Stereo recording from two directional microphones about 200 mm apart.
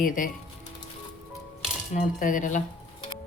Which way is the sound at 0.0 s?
40° left (ahead or behind).